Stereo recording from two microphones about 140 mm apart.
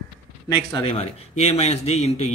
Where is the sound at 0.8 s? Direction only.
45° left (ahead or behind).